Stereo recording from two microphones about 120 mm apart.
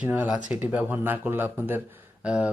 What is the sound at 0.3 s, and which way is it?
Speech, 90° left.